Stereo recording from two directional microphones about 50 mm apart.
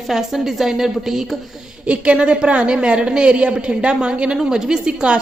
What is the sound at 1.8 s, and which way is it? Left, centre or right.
A woman's voice, right.